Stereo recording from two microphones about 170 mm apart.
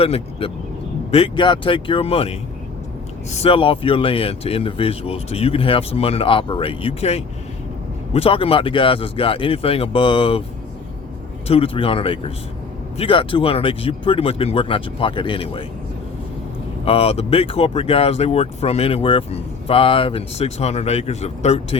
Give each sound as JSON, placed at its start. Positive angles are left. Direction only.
{"t": 0.0, "sound": "speech", "side_deg": 35}
{"t": 3.3, "sound": "speech", "side_deg": 35}
{"t": 11.4, "sound": "speech", "side_deg": 35}
{"t": 16.8, "sound": "speech", "side_deg": 35}